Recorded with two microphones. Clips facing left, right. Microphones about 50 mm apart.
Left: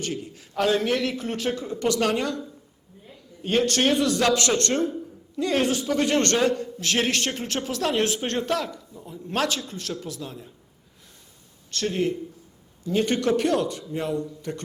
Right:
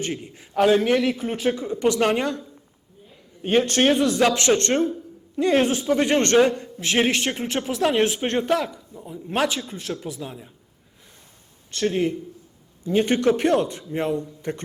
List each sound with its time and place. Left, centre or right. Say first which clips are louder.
0.0 s a man's voice: right 2 dB; right
3.4 s a man's voice: right 3 dB; centre
11.7 s a man's voice: right 3 dB; centre